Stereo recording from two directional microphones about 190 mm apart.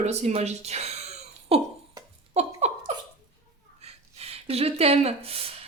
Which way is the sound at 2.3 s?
35° right (ahead or behind).